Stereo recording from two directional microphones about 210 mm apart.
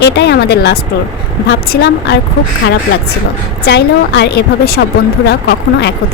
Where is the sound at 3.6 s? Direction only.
55° left (ahead or behind).